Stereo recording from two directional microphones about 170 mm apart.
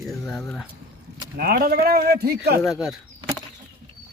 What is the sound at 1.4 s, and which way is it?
Speech, 60° right (ahead or behind).